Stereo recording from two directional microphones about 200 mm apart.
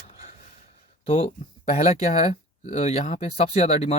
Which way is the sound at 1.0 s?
25° left (ahead or behind).